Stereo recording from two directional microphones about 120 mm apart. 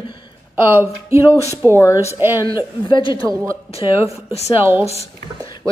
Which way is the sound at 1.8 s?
25° left (ahead or behind).